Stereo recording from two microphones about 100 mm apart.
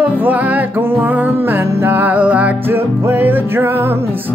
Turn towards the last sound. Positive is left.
turn(degrees=-25)  # may be behind; listen again after turning